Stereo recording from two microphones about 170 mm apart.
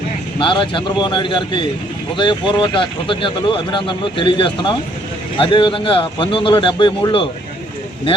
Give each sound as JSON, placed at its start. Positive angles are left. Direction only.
{"t": 0.3, "sound": "speech", "side_deg": 30}